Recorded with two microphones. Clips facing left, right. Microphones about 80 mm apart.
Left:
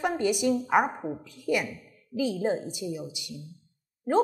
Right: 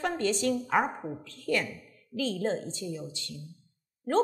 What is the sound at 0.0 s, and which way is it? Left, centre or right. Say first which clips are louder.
A woman's voice: left 3 dB; centre.